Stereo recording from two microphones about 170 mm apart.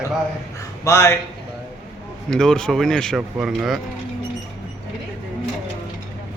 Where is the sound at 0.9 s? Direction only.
15° left (ahead or behind).